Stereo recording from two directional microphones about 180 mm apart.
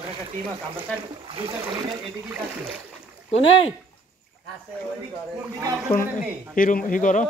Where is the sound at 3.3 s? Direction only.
90° left.